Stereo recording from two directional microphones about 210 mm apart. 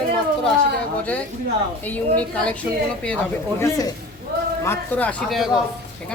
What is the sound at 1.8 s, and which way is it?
Speech, 5° left (ahead or behind).